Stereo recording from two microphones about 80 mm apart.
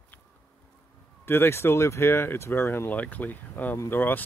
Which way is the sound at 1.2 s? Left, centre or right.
Left.